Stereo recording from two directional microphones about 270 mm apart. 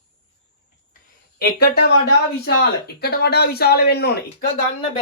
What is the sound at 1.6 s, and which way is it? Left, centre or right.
Speech, left.